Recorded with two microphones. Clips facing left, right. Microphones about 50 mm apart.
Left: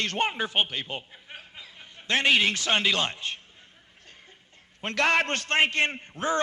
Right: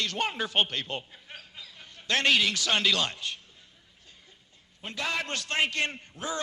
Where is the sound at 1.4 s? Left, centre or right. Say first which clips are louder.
Left 1 dB; left.